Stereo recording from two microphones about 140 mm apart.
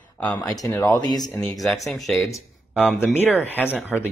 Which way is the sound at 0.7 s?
25° left (ahead or behind).